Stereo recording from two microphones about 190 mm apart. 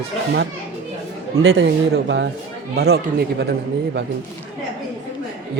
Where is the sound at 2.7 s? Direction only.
60° right (ahead or behind).